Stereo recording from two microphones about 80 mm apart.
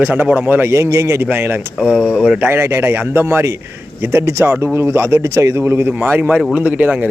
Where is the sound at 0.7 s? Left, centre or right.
Right.